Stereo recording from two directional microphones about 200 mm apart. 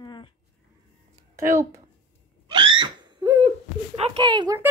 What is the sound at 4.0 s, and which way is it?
Speech, 20° right (ahead or behind).